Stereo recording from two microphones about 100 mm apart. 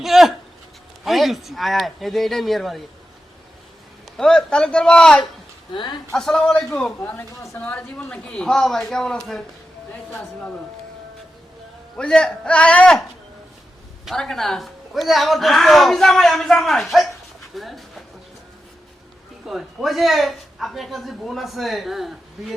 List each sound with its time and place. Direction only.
0.0 s a sound: centre (ahead or behind)
1.0 s a man's voice: centre (ahead or behind)
4.2 s a man's voice: 5° left (ahead or behind)
5.7 s speech: 50° left (ahead or behind)
6.1 s a man's voice: 5° left (ahead or behind)
11.9 s a man's voice: 10° left (ahead or behind)
14.0 s a man's voice: centre (ahead or behind)
19.5 s a man's voice: centre (ahead or behind)